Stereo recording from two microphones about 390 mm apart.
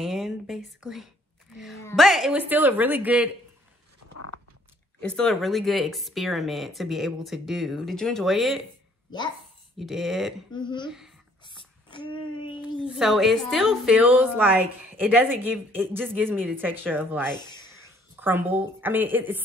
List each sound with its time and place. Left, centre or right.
0.0 s a sound: centre
0.8 s a woman's voice: centre
5.0 s a woman's voice: centre
9.8 s a woman's voice: centre
10.5 s a sound: centre
12.9 s a woman's voice: centre